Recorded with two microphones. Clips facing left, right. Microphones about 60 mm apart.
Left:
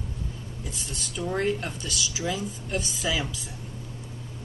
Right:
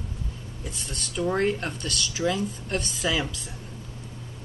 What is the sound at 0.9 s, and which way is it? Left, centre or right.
Speech, centre.